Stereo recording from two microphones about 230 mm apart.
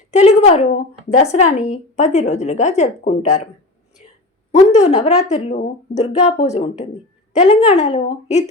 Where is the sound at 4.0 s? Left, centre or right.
Left.